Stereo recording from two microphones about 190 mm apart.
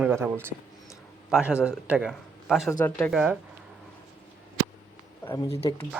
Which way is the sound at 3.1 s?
Centre (ahead or behind).